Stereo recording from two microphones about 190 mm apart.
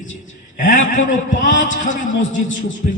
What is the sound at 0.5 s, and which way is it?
A man's voice, 40° left (ahead or behind).